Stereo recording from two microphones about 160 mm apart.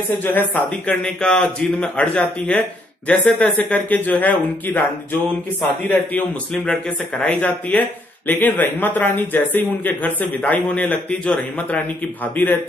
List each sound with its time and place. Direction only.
0.2 s speech: 10° left (ahead or behind)
5.9 s speech: 10° left (ahead or behind)